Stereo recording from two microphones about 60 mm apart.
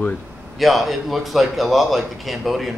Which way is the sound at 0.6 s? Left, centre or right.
Centre.